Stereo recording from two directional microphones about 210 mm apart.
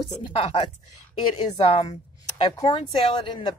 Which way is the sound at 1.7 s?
25° left (ahead or behind).